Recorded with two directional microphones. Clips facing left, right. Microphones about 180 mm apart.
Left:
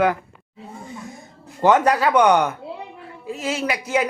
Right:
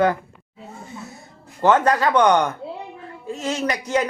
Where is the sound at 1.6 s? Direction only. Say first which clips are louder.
Left 1 dB; 10° left (ahead or behind).